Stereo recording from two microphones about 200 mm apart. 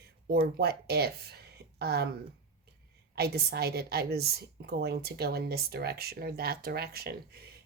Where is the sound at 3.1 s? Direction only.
55° right (ahead or behind).